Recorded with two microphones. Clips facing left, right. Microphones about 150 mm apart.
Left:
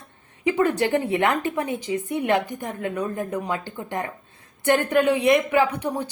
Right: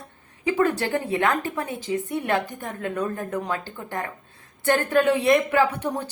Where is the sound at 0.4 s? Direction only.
20° left (ahead or behind).